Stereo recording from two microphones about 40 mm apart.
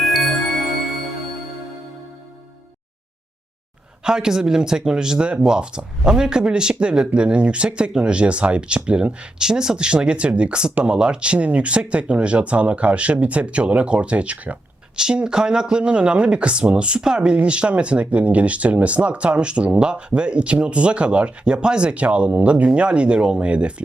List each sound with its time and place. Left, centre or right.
4.0 s speech: centre
9.4 s speech: centre; by 14.6 s right
14.9 s speech: right